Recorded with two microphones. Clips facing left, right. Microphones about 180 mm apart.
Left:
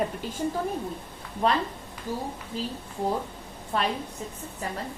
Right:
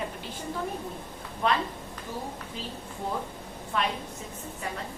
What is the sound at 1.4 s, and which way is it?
Speech, 35° left (ahead or behind).